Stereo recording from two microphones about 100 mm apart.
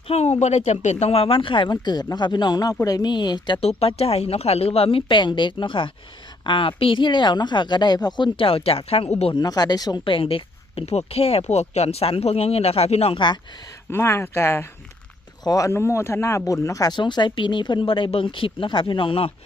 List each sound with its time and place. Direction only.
0.1 s speech: 90° left; by 3.6 s 50° left (ahead or behind)
3.6 s speech: 90° left
9.3 s speech: 40° left (ahead or behind)
10.0 s speech: 60° left (ahead or behind); by 13.1 s 90° left
13.1 s speech: 50° left (ahead or behind)
13.9 s speech: 25° left (ahead or behind)
16.9 s speech: 50° left (ahead or behind); by 19.3 s 65° left (ahead or behind)